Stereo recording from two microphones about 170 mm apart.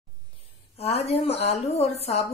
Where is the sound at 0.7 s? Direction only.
35° left (ahead or behind).